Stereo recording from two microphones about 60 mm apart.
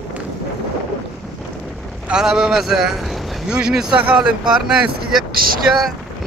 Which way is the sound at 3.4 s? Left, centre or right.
Centre.